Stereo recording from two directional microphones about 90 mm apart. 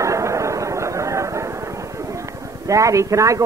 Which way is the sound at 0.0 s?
35° right (ahead or behind).